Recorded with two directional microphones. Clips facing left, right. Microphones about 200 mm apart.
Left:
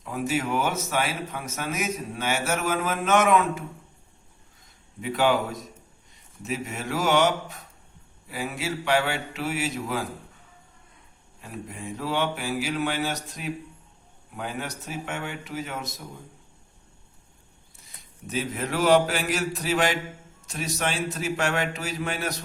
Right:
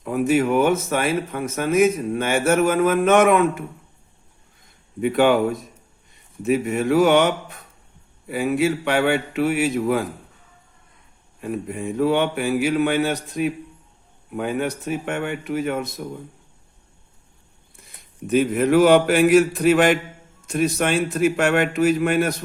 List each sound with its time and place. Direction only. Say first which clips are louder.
0.0 s a man's voice: right 9 dB; 55° right (ahead or behind)
4.9 s a man's voice: right 7 dB; 60° right (ahead or behind)
11.3 s a man's voice: right 11 dB; 55° right (ahead or behind)
17.7 s a man's voice: right 13 dB; 60° right (ahead or behind)